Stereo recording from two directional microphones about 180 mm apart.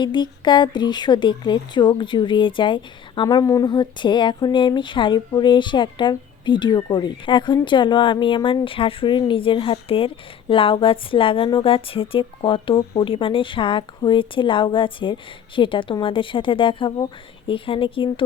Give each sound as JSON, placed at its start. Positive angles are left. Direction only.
{"t": 0.0, "sound": "speech", "side_deg": 25}